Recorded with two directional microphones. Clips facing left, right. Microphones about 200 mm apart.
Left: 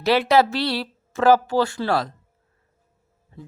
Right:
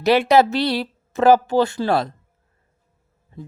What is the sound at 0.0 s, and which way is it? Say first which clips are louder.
Speech: right 3 dB; 20° right (ahead or behind).